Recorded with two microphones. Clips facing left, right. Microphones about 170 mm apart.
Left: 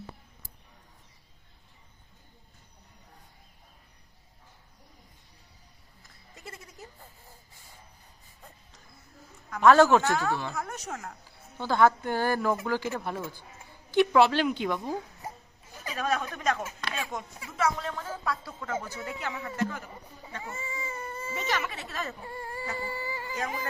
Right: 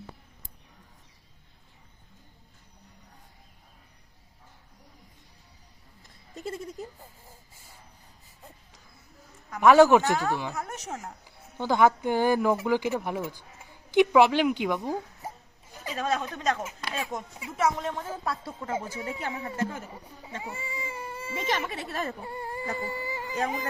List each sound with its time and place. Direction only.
9.5 s speech: 15° right (ahead or behind)
15.8 s a woman's voice: 25° right (ahead or behind)
16.9 s speech: 35° right (ahead or behind)
17.4 s speech: 20° right (ahead or behind)
20.3 s baby cry: 15° right (ahead or behind)
21.3 s speech: 30° right (ahead or behind)
22.2 s baby cry: 15° right (ahead or behind)
22.6 s a sound: 25° right (ahead or behind)